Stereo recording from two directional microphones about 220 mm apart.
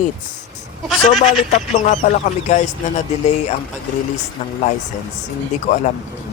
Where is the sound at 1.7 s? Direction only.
35° left (ahead or behind).